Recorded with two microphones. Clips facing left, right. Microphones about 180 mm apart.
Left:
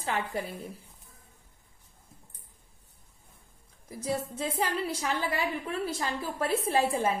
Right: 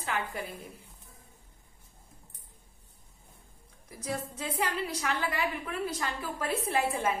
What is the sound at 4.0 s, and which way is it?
A woman's voice, 30° left (ahead or behind).